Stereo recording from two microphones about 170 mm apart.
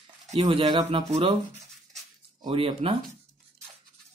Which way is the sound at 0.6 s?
25° right (ahead or behind).